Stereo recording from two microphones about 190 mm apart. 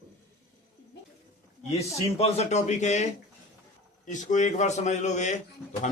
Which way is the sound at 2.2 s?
35° left (ahead or behind).